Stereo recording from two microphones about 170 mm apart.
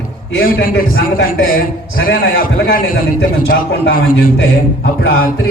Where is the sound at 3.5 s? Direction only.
70° left (ahead or behind).